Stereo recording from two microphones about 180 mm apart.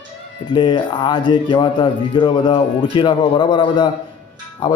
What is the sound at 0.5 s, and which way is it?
Speech, 25° left (ahead or behind).